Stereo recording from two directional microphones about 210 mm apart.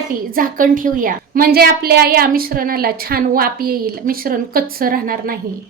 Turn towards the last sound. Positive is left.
turn(degrees=-45)  # may be behind; listen again after turning